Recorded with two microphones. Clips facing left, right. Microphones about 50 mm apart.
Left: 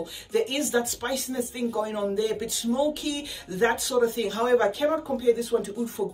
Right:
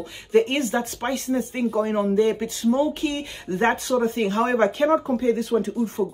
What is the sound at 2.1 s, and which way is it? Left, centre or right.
Speech, right.